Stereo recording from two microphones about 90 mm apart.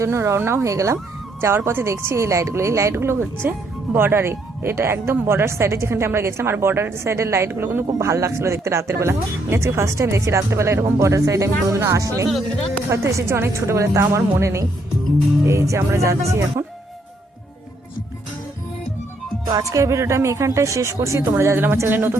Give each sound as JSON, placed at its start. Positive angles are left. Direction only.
{"t": 0.0, "sound": "a woman's voice", "side_deg": -30}
{"t": 7.9, "sound": "speech", "side_deg": -35}
{"t": 19.5, "sound": "a woman's voice", "side_deg": -35}